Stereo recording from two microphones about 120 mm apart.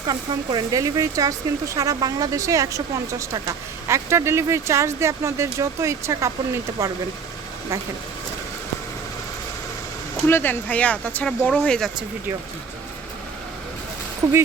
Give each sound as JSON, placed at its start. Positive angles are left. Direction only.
{"t": 0.1, "sound": "speech", "side_deg": -30}
{"t": 10.2, "sound": "speech", "side_deg": 20}